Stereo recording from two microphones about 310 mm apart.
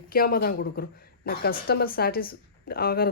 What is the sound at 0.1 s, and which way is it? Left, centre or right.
Speech, left.